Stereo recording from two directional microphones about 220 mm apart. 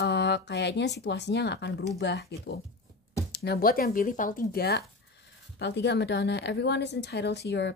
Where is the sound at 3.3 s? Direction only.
45° left (ahead or behind).